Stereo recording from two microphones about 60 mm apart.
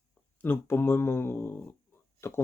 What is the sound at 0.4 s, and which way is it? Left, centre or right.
Speech, left.